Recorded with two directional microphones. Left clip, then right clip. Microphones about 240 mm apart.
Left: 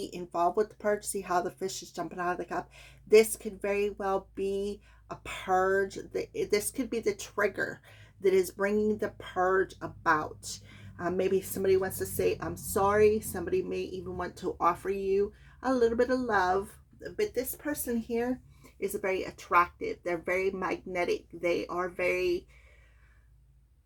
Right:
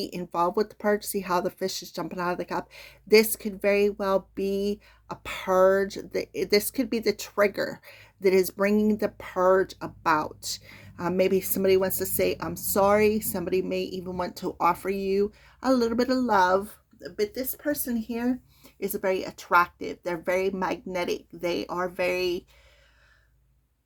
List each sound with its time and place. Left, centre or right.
0.0 s speech: right